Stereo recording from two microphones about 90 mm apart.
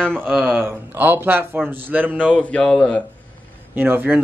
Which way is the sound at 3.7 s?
25° right (ahead or behind).